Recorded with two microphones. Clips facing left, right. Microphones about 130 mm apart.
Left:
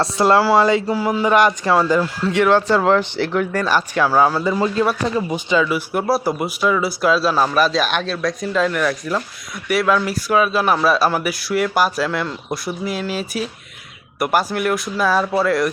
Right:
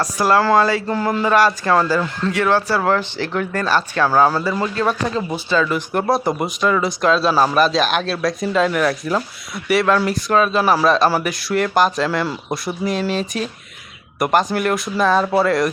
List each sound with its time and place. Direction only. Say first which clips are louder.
0.0 s speech: left 1 dB; 25° left (ahead or behind)
0.9 s speech: left 1 dB; 5° left (ahead or behind)
4.4 s speech: left 2 dB; 20° left (ahead or behind); by 15.7 s centre (ahead or behind)